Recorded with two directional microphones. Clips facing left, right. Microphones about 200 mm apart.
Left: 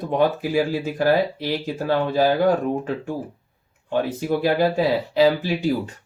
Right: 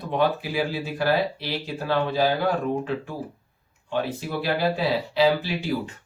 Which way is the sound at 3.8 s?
50° left (ahead or behind).